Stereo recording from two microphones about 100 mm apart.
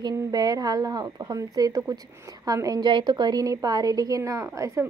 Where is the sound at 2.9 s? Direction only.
50° right (ahead or behind); by 4.9 s 30° right (ahead or behind).